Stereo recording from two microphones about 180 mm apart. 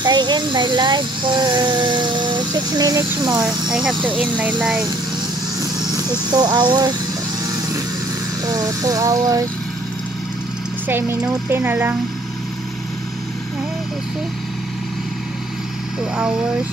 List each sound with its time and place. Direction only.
0.0 s speech: 25° right (ahead or behind)
4.2 s speech: 5° right (ahead or behind)
6.3 s speech: 25° right (ahead or behind)
8.5 s speech: 20° right (ahead or behind)
10.9 s speech: 10° right (ahead or behind)